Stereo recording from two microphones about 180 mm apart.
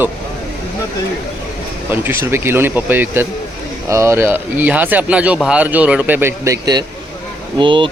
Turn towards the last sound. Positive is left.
turn(degrees=-25)  # may be behind; listen again after turning